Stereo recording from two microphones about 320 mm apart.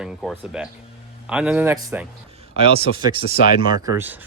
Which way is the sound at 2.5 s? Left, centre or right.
Centre.